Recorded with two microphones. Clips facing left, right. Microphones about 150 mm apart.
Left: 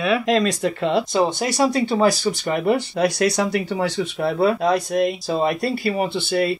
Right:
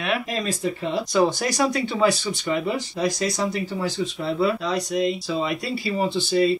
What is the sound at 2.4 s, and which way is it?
Speech, 55° left (ahead or behind).